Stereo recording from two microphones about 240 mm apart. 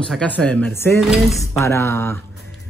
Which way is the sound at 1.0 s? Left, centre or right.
Centre.